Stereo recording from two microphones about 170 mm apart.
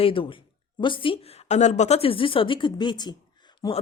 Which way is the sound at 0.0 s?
30° left (ahead or behind).